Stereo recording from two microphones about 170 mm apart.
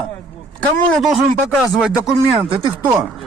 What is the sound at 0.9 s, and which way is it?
Speech, centre (ahead or behind).